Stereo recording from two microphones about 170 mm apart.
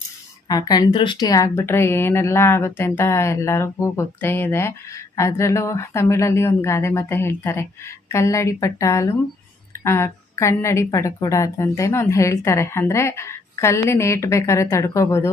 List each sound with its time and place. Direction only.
0.4 s a woman's voice: 20° left (ahead or behind)